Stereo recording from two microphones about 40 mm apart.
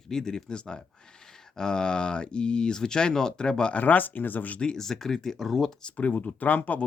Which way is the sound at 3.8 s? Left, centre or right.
Left.